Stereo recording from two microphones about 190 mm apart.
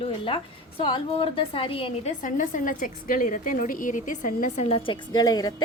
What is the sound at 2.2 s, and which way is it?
A woman's voice, 45° left (ahead or behind).